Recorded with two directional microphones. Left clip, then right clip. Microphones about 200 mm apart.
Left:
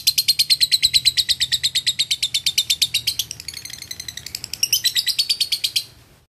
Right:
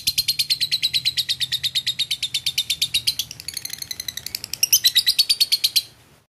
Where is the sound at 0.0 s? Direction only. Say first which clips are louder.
Left 4 dB; centre (ahead or behind).